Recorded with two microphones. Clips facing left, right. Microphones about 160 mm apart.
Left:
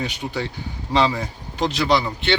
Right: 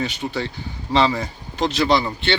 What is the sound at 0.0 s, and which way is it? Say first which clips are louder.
Speech: right 2 dB; 15° left (ahead or behind).